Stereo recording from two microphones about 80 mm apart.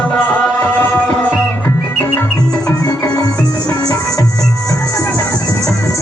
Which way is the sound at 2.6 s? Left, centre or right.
Left.